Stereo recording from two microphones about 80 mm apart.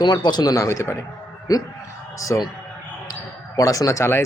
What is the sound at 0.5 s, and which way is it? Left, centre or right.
Speech, left.